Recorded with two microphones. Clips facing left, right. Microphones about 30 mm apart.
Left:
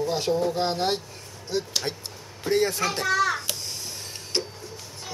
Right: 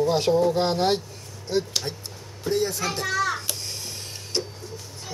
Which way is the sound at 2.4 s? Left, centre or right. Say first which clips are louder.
Left 2 dB; left.